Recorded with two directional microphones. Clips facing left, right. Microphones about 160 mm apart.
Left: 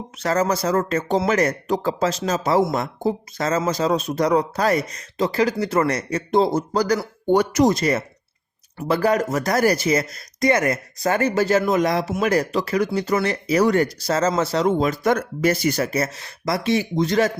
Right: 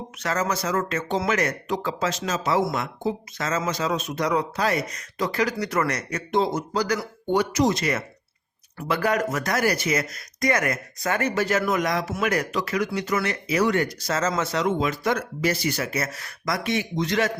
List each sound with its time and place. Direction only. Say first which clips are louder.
0.2 s speech: left 5 dB; 35° left (ahead or behind)
7.3 s speech: left 5 dB; 50° left (ahead or behind)
7.8 s speech: left 5 dB; 35° left (ahead or behind)